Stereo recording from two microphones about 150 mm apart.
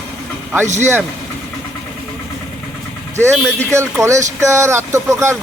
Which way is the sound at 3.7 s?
20° right (ahead or behind).